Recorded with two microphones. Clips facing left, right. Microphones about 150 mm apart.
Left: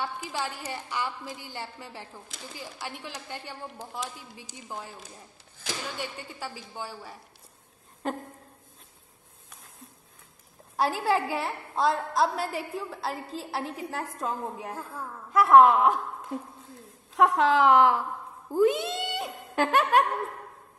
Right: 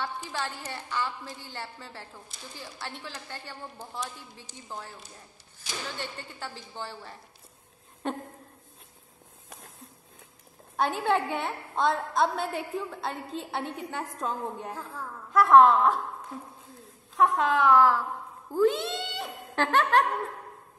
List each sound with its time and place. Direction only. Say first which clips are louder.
0.0 s a woman's voice: left 1 dB; 10° left (ahead or behind)
5.9 s a woman's voice: left 2 dB; 10° left (ahead or behind)
10.8 s a woman's voice: even; centre (ahead or behind)
14.8 s a woman's voice: left 1 dB; 10° left (ahead or behind)
17.5 s a woman's voice: even; 25° left (ahead or behind); by 20.1 s 10° left (ahead or behind)